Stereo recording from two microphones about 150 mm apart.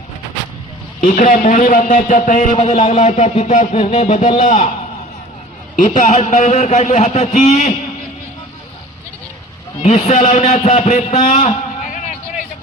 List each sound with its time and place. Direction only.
1.0 s a man's voice: 65° left (ahead or behind)
5.7 s a man's voice: 55° left (ahead or behind)
9.8 s a man's voice: 45° left (ahead or behind)